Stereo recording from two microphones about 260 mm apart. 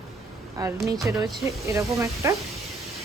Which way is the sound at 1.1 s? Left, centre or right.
Centre.